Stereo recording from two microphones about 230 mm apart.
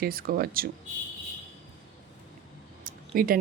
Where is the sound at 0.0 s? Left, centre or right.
Right.